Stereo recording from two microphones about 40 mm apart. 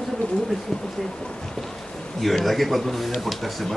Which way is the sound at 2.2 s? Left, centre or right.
Centre.